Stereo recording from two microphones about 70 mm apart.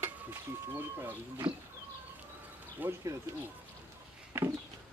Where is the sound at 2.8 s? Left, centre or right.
Right.